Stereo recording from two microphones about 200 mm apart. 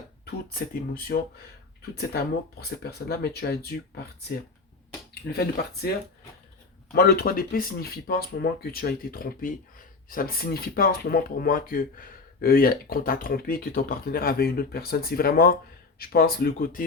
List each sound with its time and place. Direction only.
0.3 s speech: 50° left (ahead or behind)
5.3 s speech: 50° left (ahead or behind)
6.9 s speech: 50° left (ahead or behind)